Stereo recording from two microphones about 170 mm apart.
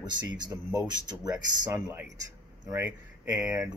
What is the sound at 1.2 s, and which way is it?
Speech, 20° right (ahead or behind).